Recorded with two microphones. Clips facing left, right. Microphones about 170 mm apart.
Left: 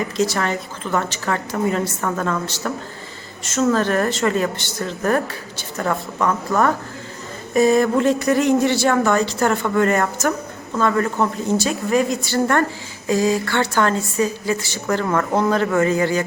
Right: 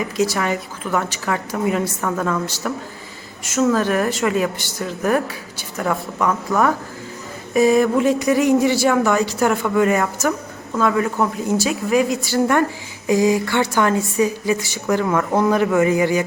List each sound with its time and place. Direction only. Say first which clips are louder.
0.0 s speech: even; 10° right (ahead or behind)